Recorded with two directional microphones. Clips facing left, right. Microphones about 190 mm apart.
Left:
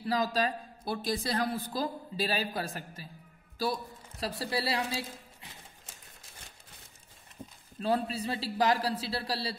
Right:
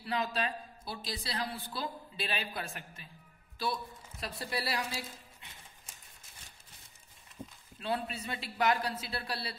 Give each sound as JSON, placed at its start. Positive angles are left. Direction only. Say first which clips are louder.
{"t": 0.0, "sound": "a woman's voice", "louder": "left 5 dB", "side_deg": 40}
{"t": 0.8, "sound": "a woman's voice", "louder": "left 9 dB", "side_deg": 50}
{"t": 7.8, "sound": "a woman's voice", "louder": "left 6 dB", "side_deg": 35}